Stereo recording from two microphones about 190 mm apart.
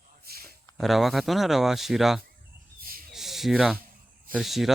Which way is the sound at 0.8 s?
Centre (ahead or behind).